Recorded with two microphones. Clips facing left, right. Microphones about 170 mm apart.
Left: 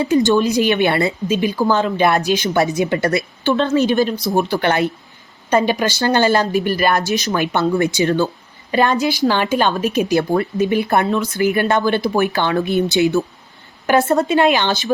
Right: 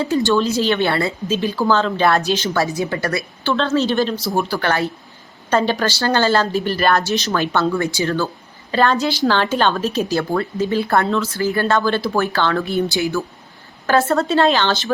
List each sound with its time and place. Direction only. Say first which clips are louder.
0.0 s speech: left 3 dB; 20° left (ahead or behind)
4.3 s a woman's voice: left 3 dB; 20° left (ahead or behind)